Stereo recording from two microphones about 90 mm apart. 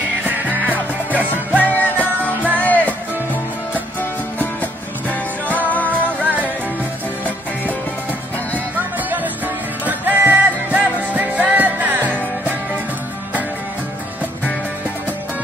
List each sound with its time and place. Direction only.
0.2 s music: 20° right (ahead or behind)
1.6 s music: 20° left (ahead or behind)
5.5 s music: 20° left (ahead or behind)
9.8 s music: 20° right (ahead or behind)